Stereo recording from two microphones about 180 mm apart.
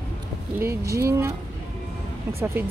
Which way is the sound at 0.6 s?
15° right (ahead or behind).